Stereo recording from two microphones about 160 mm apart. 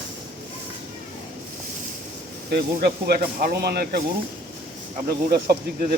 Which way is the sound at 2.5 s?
75° right (ahead or behind).